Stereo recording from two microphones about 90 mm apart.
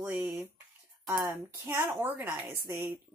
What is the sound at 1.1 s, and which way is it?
Speech, 30° right (ahead or behind).